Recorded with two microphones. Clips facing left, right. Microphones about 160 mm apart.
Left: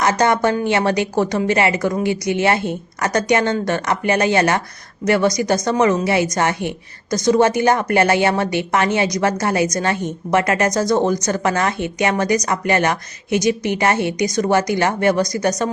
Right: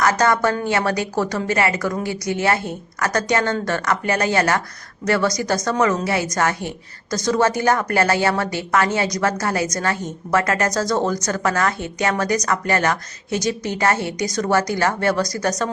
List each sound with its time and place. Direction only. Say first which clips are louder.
0.0 s a woman's voice: left 2 dB; 20° left (ahead or behind)